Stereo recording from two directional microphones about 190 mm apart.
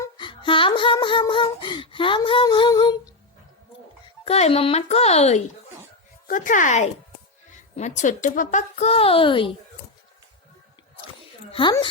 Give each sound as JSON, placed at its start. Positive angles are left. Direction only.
{"t": 0.0, "sound": "humming", "side_deg": 25}
{"t": 4.2, "sound": "a woman's voice", "side_deg": 35}
{"t": 11.5, "sound": "humming", "side_deg": 25}